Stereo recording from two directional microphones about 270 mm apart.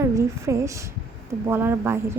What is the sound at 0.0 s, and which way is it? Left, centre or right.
A woman's voice, centre.